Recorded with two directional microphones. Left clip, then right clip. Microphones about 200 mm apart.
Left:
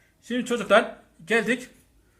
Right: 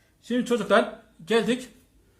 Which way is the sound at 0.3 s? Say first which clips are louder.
Left 1 dB; 15° right (ahead or behind).